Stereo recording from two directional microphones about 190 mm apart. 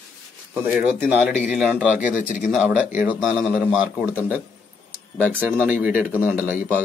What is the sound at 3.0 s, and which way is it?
Speech, 10° right (ahead or behind).